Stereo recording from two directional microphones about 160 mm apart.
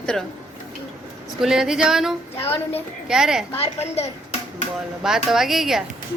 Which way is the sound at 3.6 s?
40° left (ahead or behind).